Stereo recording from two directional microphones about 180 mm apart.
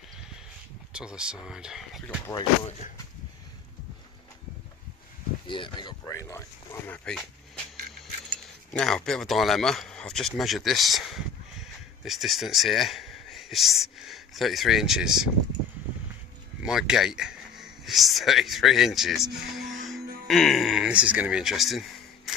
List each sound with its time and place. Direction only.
0.9 s speech: 5° right (ahead or behind)
2.2 s speech: 25° left (ahead or behind)
5.5 s speech: 25° left (ahead or behind)
7.1 s a sound: 5° left (ahead or behind)
8.7 s speech: 5° left (ahead or behind)
16.6 s speech: 5° right (ahead or behind)